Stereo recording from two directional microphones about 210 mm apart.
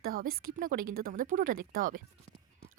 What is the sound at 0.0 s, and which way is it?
A woman's voice, 45° right (ahead or behind).